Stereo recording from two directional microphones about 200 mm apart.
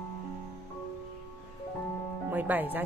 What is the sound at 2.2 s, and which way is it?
Speech, 10° right (ahead or behind).